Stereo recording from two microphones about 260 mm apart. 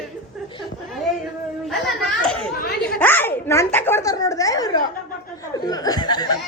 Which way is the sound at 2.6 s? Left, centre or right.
Left.